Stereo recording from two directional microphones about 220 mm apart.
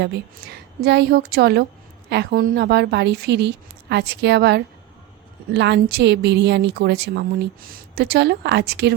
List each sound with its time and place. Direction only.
0.0 s a woman's voice: 50° right (ahead or behind)